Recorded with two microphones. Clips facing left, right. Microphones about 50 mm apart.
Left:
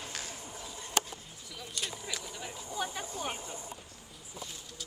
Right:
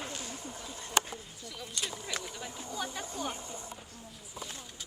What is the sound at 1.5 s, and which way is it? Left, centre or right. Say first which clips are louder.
Speech: even; centre.